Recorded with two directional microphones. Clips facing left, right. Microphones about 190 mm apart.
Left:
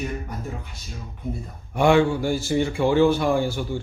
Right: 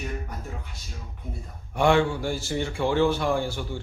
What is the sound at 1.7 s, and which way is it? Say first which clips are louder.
Speech: left 3 dB; 10° left (ahead or behind).